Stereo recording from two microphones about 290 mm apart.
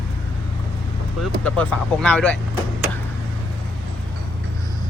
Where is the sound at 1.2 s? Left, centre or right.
Centre.